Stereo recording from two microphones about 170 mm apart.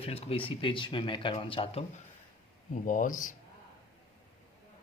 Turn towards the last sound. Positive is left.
turn(degrees=50)  # may be behind; listen again after turning